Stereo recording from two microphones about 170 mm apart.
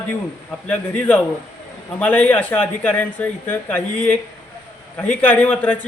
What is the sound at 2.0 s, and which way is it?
Speech, 10° left (ahead or behind).